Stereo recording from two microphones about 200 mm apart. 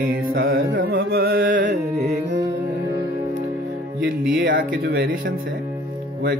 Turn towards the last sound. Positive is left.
turn(degrees=-60)  # may be behind; listen again after turning